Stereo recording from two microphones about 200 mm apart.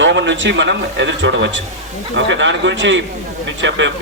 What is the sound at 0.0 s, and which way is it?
A man's voice, 65° right (ahead or behind).